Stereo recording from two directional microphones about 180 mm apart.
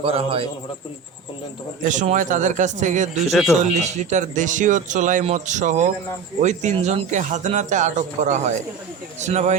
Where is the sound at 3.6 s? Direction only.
40° right (ahead or behind).